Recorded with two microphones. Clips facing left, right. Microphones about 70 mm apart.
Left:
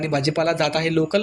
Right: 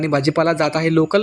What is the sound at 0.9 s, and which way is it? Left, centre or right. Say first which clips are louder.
Speech: right 5 dB; right.